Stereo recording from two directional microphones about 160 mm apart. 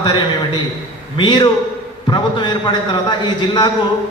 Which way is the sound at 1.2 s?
30° left (ahead or behind).